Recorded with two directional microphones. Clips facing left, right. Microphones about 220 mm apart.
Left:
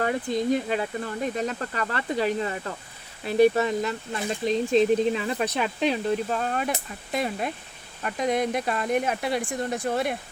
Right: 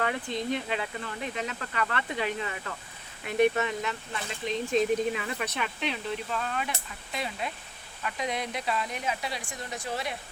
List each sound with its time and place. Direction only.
0.0 s speech: 35° left (ahead or behind); by 10.2 s 55° left (ahead or behind)